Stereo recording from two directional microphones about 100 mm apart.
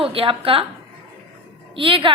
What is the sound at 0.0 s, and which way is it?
Speech, 65° right (ahead or behind).